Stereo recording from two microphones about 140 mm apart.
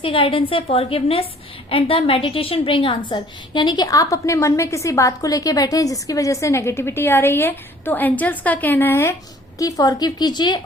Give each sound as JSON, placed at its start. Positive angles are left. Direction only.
{"t": 0.0, "sound": "a woman's voice", "side_deg": 40}